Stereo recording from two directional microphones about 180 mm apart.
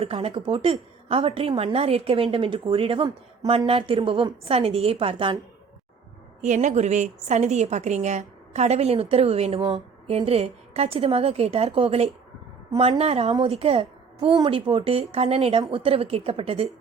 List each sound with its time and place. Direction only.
0.0 s a woman's voice: 30° right (ahead or behind)
6.4 s a woman's voice: 40° right (ahead or behind)